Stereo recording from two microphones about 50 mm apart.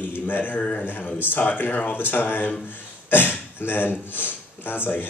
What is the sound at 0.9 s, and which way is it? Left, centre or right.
A man's voice, left.